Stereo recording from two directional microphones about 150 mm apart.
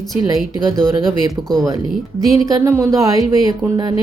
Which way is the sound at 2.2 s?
25° right (ahead or behind).